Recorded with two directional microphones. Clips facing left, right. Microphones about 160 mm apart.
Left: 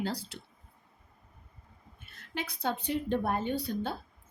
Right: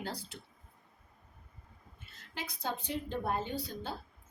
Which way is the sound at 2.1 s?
65° left (ahead or behind).